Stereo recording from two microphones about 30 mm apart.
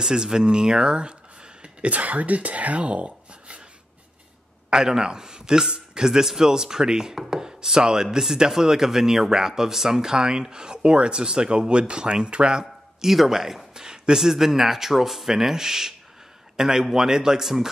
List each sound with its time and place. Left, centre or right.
0.0 s speech: right
1.9 s speech: right
4.6 s a man's voice: right
10.1 s a man's voice: right
13.0 s speech: centre
13.7 s a man's voice: right